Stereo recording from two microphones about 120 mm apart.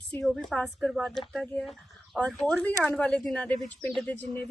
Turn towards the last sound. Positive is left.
turn(degrees=10)  # may be behind; listen again after turning